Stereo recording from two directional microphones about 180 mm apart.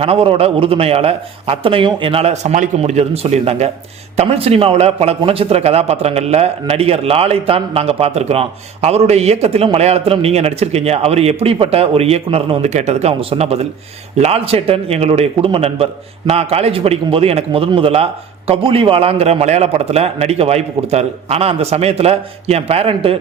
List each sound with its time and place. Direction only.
0.0 s speech: 30° right (ahead or behind)